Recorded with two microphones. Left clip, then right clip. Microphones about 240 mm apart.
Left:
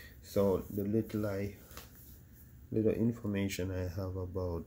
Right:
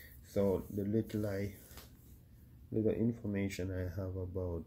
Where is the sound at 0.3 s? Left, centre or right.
Centre.